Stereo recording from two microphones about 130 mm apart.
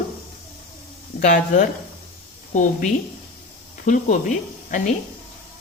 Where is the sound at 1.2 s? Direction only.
90° left.